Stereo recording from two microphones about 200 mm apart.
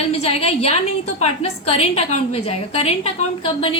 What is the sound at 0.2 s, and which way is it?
A woman's voice, 30° left (ahead or behind).